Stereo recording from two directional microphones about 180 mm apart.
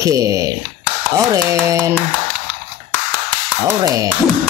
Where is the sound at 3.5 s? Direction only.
20° right (ahead or behind).